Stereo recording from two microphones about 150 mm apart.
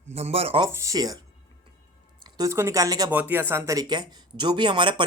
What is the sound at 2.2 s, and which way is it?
Speech, 25° right (ahead or behind).